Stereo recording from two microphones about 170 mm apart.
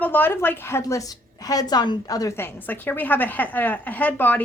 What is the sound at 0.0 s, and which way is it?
A woman's voice, 10° left (ahead or behind).